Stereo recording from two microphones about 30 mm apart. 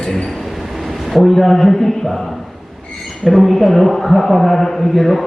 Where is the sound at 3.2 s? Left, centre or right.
Centre.